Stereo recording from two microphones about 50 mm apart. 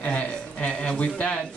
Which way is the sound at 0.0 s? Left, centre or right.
Left.